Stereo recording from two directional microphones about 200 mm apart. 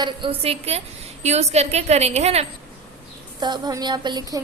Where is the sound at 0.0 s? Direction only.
25° right (ahead or behind).